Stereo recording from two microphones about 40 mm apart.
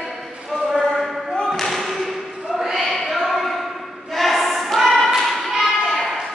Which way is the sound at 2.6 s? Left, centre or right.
Centre.